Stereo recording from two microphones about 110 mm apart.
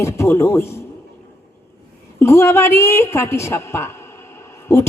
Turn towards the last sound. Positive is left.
turn(degrees=30)  # may be behind; listen again after turning